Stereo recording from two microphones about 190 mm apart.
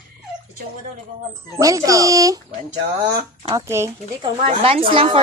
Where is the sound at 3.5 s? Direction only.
15° right (ahead or behind).